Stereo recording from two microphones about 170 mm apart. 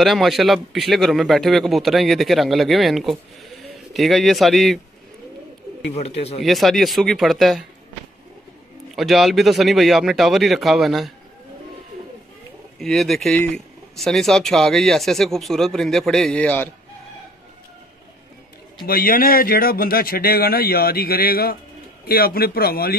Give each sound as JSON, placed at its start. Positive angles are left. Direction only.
{"t": 0.0, "sound": "a man's voice", "side_deg": 0}
{"t": 5.9, "sound": "a man's voice", "side_deg": 40}
{"t": 6.4, "sound": "a man's voice", "side_deg": 0}
{"t": 8.9, "sound": "a man's voice", "side_deg": 0}
{"t": 12.7, "sound": "a man's voice", "side_deg": 0}
{"t": 18.9, "sound": "speech", "side_deg": 55}